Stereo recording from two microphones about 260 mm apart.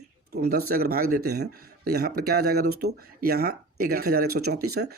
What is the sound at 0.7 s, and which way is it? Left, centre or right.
Speech, right.